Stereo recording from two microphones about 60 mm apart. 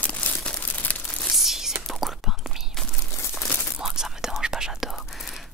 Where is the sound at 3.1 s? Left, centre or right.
Left.